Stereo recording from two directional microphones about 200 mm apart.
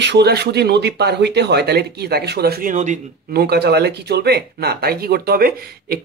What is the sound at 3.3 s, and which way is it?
Speech, 55° right (ahead or behind).